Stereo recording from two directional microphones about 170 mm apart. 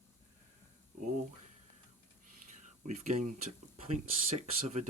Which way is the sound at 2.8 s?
45° right (ahead or behind).